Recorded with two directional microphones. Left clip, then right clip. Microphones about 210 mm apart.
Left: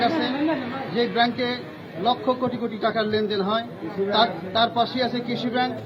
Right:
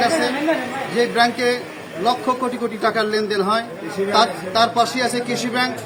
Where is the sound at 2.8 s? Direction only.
15° right (ahead or behind).